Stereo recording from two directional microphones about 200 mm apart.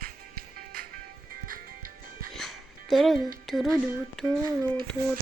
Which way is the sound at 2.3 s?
Centre (ahead or behind).